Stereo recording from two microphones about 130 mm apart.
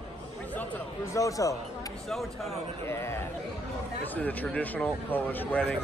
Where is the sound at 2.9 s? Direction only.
20° left (ahead or behind).